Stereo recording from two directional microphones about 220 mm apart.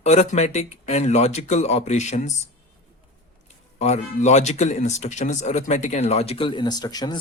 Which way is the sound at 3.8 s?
30° left (ahead or behind).